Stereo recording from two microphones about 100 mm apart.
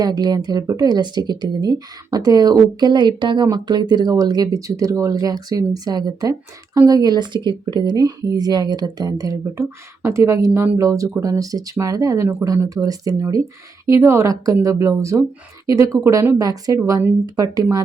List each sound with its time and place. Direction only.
0.0 s a woman's voice: 40° right (ahead or behind)